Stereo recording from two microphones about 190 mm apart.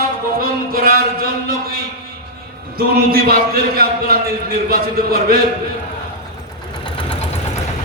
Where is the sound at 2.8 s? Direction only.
50° right (ahead or behind).